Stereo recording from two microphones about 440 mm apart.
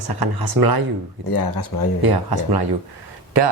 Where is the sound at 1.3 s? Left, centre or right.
Left.